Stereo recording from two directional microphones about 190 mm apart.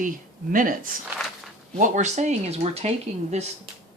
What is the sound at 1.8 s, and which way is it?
Speech, 40° right (ahead or behind).